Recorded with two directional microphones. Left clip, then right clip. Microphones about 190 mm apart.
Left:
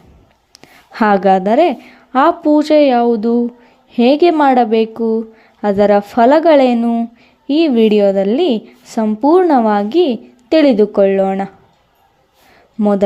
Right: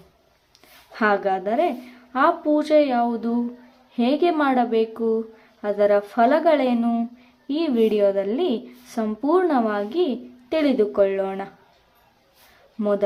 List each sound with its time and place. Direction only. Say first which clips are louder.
0.5 s a woman's voice: left 10 dB; 50° left (ahead or behind)
6.7 s speech: left 7 dB; 30° left (ahead or behind)
7.4 s a woman's voice: left 9 dB; 40° left (ahead or behind)
12.8 s speech: left 8 dB; 40° left (ahead or behind)